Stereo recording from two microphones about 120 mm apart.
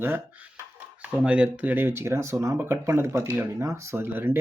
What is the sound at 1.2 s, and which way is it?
Speech, 10° right (ahead or behind).